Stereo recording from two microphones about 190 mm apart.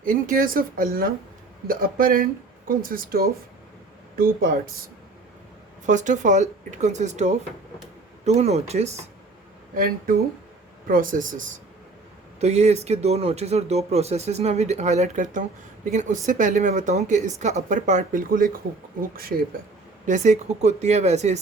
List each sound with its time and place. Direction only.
0.0 s speech: 45° right (ahead or behind)
5.8 s speech: 40° right (ahead or behind)
9.7 s speech: 50° right (ahead or behind)
20.1 s speech: 40° right (ahead or behind)